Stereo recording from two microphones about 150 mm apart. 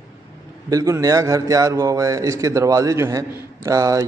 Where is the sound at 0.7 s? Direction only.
20° right (ahead or behind).